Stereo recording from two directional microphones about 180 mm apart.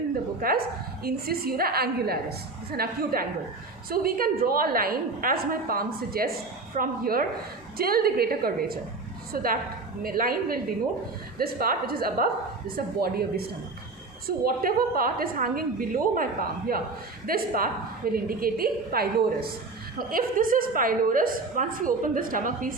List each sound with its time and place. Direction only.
0.4 s a woman's voice: 60° right (ahead or behind)